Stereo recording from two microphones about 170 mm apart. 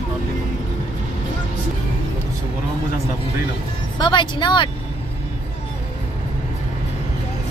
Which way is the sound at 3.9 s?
30° left (ahead or behind).